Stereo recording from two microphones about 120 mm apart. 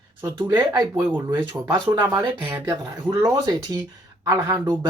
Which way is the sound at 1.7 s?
40° right (ahead or behind).